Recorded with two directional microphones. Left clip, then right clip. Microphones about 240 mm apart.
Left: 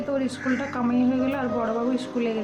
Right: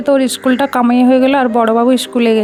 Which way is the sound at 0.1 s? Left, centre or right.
Right.